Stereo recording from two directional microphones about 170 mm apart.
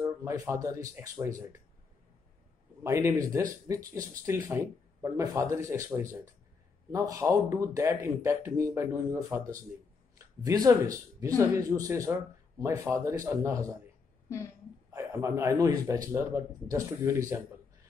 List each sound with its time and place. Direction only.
0.0 s speech: 20° right (ahead or behind)
2.8 s speech: 15° right (ahead or behind)
14.9 s speech: 20° right (ahead or behind)